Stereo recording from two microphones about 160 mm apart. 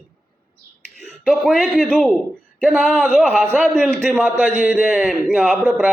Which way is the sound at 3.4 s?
10° right (ahead or behind).